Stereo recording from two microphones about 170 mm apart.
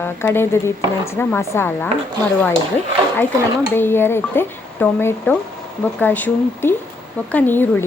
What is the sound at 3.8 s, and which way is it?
Speech, 15° left (ahead or behind).